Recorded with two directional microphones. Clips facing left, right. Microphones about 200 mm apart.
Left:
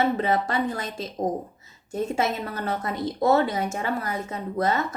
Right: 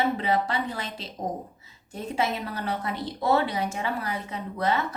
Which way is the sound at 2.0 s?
45° left (ahead or behind).